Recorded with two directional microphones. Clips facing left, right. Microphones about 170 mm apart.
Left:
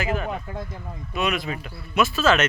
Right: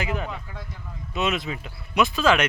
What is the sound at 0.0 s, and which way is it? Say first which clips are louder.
Speech: left 3 dB; 20° right (ahead or behind).